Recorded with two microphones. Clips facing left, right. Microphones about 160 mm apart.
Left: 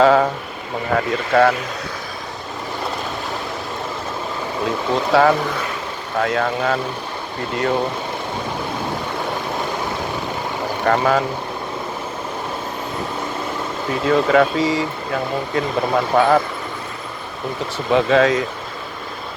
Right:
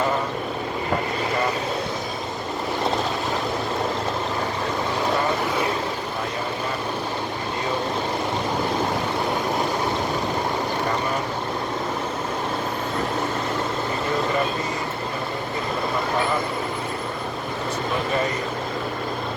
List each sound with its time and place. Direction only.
0.0 s vehicle: 90° left
1.3 s speech: 90° left
5.1 s speech: 90° left
10.8 s speech: 80° left
14.1 s speech: 90° left
16.1 s speech: 90° left
17.9 s speech: 90° left